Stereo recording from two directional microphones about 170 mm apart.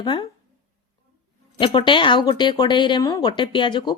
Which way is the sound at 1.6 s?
30° left (ahead or behind).